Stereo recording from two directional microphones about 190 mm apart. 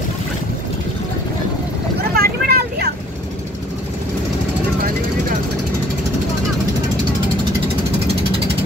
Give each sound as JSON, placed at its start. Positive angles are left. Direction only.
{"t": 2.1, "sound": "vehicle", "side_deg": -55}